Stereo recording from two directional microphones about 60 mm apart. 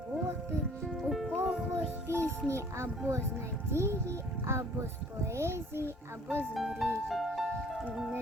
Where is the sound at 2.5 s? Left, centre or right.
Right.